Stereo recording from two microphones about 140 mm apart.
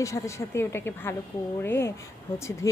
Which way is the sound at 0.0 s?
20° left (ahead or behind).